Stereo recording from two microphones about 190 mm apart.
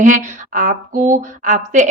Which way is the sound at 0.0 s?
40° right (ahead or behind).